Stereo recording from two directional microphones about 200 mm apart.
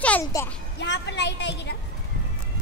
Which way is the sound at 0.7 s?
60° left (ahead or behind).